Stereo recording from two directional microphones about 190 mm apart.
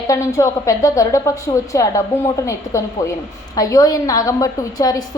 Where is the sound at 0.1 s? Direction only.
15° left (ahead or behind).